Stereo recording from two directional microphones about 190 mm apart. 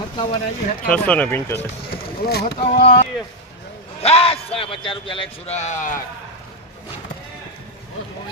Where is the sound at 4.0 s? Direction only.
30° left (ahead or behind).